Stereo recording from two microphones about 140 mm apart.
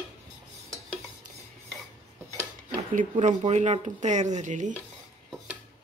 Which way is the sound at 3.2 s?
55° right (ahead or behind).